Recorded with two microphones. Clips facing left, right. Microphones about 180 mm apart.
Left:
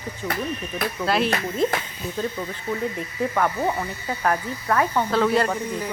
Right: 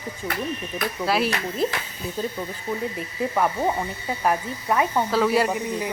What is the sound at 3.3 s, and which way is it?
Speech, 15° right (ahead or behind).